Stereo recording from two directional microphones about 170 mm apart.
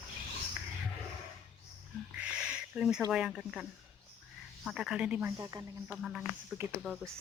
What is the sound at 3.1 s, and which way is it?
Speech, centre (ahead or behind).